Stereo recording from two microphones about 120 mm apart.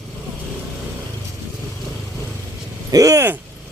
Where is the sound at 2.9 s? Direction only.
30° right (ahead or behind).